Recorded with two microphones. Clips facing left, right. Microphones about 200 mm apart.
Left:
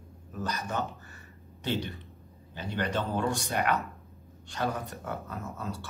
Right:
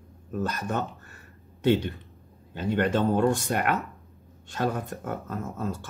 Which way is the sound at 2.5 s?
55° right (ahead or behind).